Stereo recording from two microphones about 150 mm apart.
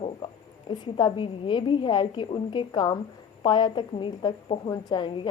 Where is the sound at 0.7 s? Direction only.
30° left (ahead or behind).